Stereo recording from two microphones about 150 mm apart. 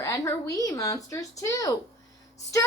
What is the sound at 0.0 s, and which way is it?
A woman's voice, 20° left (ahead or behind).